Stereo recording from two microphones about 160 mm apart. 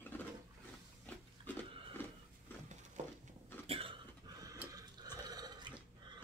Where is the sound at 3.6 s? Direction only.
40° right (ahead or behind).